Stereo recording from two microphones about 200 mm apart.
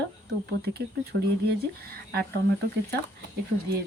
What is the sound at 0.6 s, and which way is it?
Speech, 55° right (ahead or behind).